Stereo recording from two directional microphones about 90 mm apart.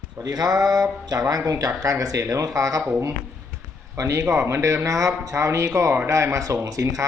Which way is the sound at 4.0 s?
35° right (ahead or behind).